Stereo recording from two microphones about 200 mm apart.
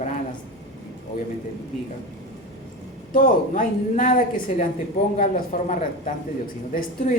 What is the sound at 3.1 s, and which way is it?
A woman's voice, 40° left (ahead or behind).